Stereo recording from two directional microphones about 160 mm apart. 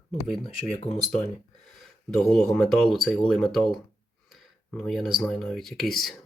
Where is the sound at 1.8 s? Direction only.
Centre (ahead or behind).